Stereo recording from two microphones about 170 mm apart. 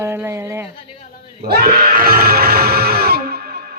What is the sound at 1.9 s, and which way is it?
Music, 60° right (ahead or behind).